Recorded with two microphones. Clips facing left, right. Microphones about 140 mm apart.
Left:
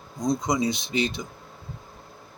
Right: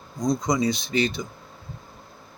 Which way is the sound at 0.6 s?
20° left (ahead or behind).